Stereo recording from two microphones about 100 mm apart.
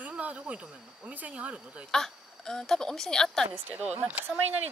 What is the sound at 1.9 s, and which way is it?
A woman's voice, 5° left (ahead or behind).